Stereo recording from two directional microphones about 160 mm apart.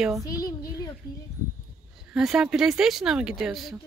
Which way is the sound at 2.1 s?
5° right (ahead or behind).